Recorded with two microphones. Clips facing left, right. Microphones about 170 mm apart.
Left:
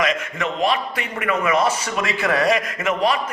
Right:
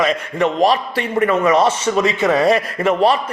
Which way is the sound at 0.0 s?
35° right (ahead or behind).